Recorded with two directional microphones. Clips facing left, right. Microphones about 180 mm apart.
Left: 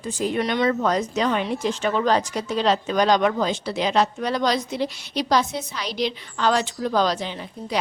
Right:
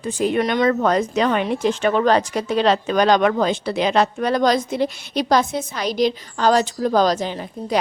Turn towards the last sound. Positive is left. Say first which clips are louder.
# right 4 dB
turn(degrees=-45)  # may be behind; listen again after turning